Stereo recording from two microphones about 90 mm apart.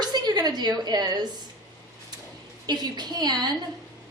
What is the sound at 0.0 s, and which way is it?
A woman's voice, 50° right (ahead or behind).